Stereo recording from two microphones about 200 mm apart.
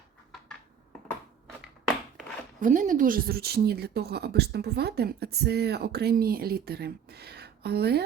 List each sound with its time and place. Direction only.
2.6 s a woman's voice: 40° right (ahead or behind)